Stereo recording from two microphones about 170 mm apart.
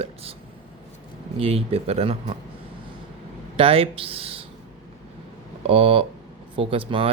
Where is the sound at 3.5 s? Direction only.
35° right (ahead or behind).